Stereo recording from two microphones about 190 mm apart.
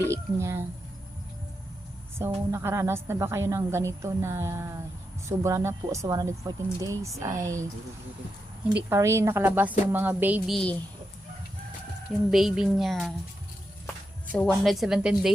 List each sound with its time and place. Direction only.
0.0 s a woman's voice: 15° right (ahead or behind)
2.1 s a woman's voice: 15° right (ahead or behind)
8.9 s a woman's voice: 15° right (ahead or behind); by 10.8 s 5° left (ahead or behind)
12.3 s a woman's voice: centre (ahead or behind)
14.3 s a woman's voice: centre (ahead or behind)